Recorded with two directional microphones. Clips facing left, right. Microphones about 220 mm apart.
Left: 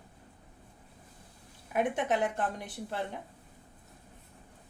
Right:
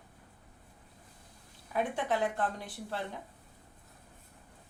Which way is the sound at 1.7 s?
20° left (ahead or behind).